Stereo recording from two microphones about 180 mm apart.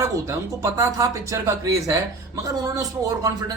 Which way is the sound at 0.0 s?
15° right (ahead or behind).